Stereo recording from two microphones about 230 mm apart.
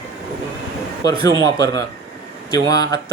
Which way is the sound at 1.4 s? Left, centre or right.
Centre.